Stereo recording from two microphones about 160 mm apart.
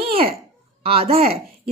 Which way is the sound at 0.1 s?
35° right (ahead or behind).